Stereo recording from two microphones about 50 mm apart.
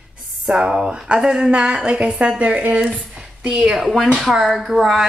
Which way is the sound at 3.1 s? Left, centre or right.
Centre.